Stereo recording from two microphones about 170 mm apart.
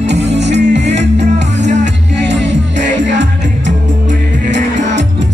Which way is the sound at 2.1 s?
90° right.